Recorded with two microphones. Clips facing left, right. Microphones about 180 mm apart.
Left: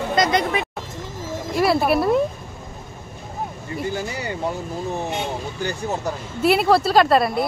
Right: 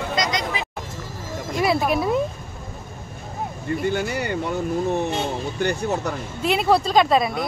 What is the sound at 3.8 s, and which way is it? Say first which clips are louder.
Speech: right 2 dB; 65° right (ahead or behind).